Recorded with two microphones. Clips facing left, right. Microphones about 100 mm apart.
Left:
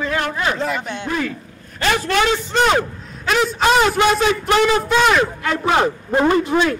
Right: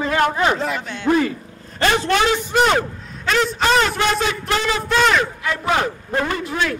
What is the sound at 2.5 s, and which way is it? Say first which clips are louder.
A man's voice: even; centre (ahead or behind).